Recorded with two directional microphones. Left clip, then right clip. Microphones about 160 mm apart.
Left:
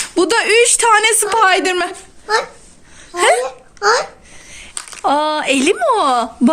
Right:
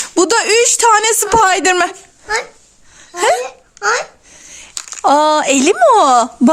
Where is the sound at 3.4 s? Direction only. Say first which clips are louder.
Left 2 dB; 15° right (ahead or behind).